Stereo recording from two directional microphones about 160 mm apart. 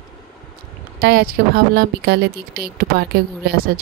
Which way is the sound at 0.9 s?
75° right (ahead or behind).